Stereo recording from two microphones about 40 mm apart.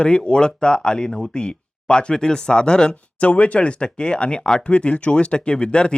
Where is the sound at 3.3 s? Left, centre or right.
Left.